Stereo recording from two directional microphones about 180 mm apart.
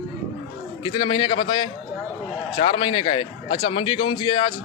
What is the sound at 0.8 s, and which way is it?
A man's voice, 25° left (ahead or behind).